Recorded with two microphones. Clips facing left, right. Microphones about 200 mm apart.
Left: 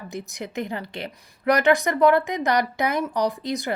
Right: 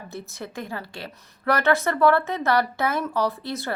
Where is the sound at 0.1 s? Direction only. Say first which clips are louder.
Left 3 dB; 15° left (ahead or behind).